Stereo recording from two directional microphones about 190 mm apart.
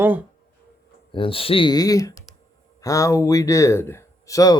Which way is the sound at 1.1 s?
30° left (ahead or behind).